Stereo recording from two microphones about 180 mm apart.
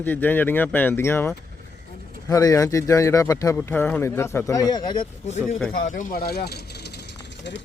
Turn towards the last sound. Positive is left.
turn(degrees=70)  # may be behind; listen again after turning